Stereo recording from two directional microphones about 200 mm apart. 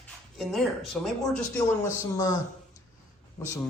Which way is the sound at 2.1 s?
15° left (ahead or behind).